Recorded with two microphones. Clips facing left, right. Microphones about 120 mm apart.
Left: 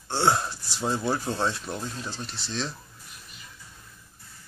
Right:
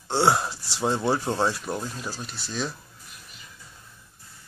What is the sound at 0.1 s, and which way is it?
Speech, 15° right (ahead or behind).